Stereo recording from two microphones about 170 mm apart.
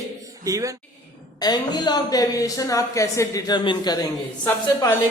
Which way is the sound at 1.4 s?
25° left (ahead or behind).